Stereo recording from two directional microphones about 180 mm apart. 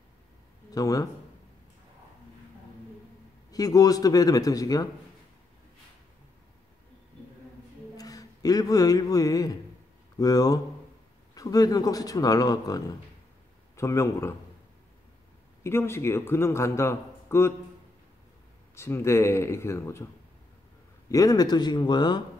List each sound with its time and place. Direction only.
0.7 s speech: 20° left (ahead or behind)
3.5 s speech: 20° left (ahead or behind)
8.0 s a man's voice: 20° left (ahead or behind)
15.6 s a man's voice: 15° left (ahead or behind)
18.8 s a man's voice: 15° left (ahead or behind)
21.1 s speech: 20° left (ahead or behind)